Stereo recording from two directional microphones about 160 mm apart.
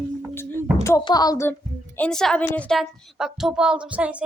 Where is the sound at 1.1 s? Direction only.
25° left (ahead or behind).